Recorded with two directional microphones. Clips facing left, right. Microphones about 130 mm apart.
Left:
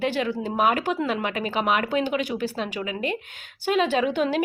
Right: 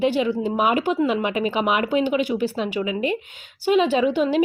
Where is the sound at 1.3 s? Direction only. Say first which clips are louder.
Right 4 dB; 40° left (ahead or behind).